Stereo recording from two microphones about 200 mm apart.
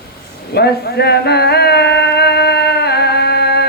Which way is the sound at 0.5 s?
55° left (ahead or behind).